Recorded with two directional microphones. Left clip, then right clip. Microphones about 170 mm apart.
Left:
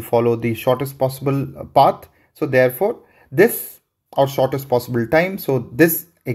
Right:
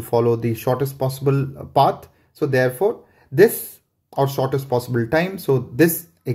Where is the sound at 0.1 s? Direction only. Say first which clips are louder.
Left 1 dB; 20° left (ahead or behind).